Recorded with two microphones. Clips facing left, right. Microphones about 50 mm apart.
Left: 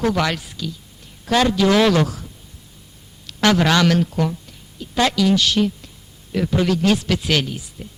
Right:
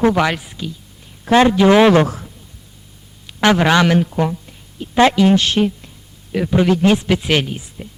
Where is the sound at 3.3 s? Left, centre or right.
Right.